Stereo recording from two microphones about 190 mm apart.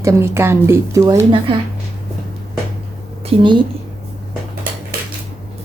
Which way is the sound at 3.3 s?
25° right (ahead or behind).